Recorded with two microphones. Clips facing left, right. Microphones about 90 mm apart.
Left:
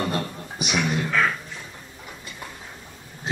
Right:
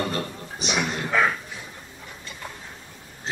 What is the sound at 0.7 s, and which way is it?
Speech, 10° right (ahead or behind).